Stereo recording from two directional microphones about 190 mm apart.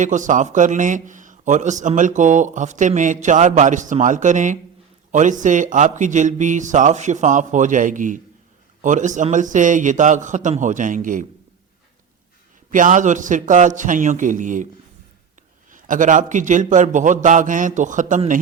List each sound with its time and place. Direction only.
0.0 s a man's voice: 40° right (ahead or behind)
12.7 s a man's voice: 45° right (ahead or behind)
15.7 s a man's voice: 45° right (ahead or behind)